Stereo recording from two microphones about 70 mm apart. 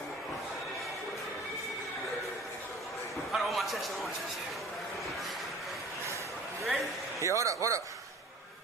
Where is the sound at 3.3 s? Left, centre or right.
Centre.